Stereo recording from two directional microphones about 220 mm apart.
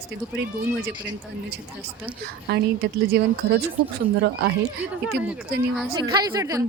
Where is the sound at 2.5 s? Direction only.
50° right (ahead or behind).